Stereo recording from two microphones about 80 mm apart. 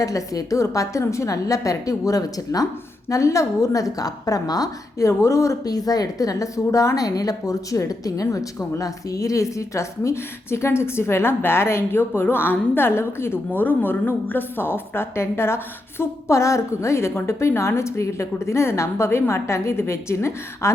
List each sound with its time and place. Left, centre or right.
0.0 s a woman's voice: left